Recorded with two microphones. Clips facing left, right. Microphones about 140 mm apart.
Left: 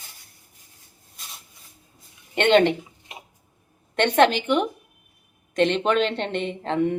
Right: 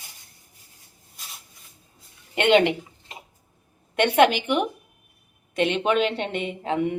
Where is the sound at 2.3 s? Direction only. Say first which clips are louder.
Left 1 dB; 10° right (ahead or behind).